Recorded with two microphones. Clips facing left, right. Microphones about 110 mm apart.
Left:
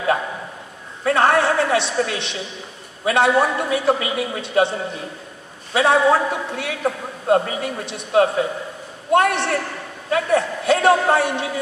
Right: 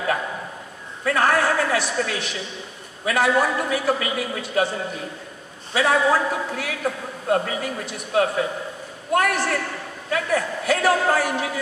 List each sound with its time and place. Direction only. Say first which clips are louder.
1.0 s a man's voice: left 3 dB; 25° left (ahead or behind)